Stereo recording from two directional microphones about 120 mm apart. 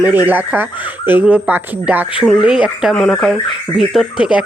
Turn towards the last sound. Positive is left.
turn(degrees=-5)  # may be behind; listen again after turning